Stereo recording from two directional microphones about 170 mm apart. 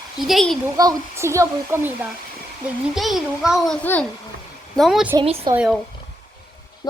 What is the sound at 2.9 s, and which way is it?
A child's voice, centre (ahead or behind).